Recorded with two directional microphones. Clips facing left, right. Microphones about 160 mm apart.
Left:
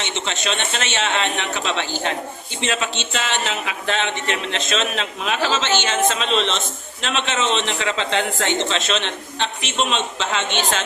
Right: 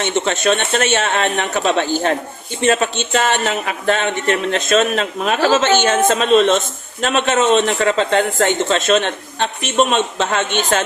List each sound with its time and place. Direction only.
0.0 s speech: 50° right (ahead or behind)